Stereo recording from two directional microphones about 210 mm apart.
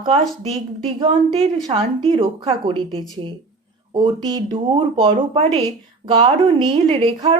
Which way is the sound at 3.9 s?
20° right (ahead or behind).